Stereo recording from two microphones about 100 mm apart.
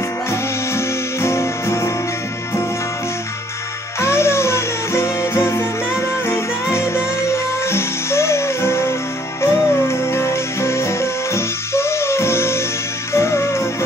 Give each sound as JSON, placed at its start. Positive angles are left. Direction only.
{"t": 0.3, "sound": "music", "side_deg": 25}
{"t": 4.0, "sound": "music", "side_deg": 25}